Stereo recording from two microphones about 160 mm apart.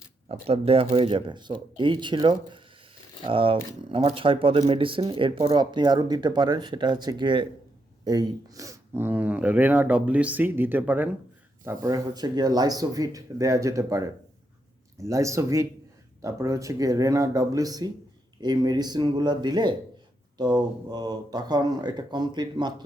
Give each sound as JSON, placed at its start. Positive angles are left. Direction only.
{"t": 0.3, "sound": "speech", "side_deg": -40}